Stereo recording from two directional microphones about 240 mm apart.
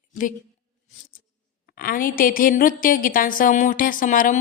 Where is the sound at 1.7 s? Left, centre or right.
Left.